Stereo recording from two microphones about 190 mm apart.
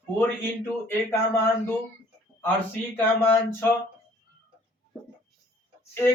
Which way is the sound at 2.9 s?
10° left (ahead or behind).